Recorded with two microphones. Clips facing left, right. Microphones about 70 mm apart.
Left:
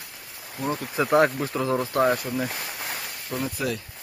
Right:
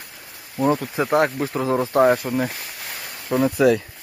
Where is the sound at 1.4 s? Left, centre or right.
Centre.